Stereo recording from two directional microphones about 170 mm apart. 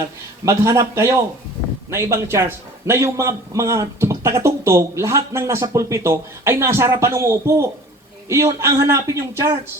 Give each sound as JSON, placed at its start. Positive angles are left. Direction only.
{"t": 0.4, "sound": "a man's voice", "side_deg": -20}